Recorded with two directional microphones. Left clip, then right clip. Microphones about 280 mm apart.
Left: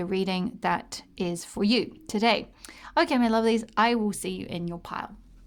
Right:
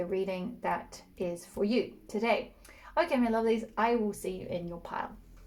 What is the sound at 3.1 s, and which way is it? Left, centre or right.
Speech, left.